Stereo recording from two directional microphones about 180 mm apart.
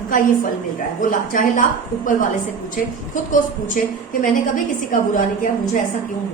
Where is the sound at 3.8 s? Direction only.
50° left (ahead or behind).